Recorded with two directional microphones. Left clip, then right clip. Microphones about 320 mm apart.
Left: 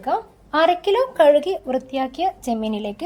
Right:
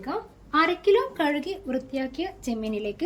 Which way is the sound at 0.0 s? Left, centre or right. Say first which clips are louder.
Left 9 dB; left.